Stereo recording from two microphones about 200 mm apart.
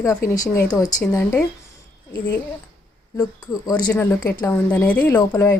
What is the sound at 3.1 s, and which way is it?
Speech, 15° left (ahead or behind).